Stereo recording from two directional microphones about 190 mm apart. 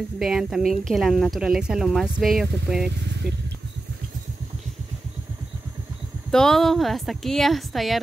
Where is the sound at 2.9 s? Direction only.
60° right (ahead or behind).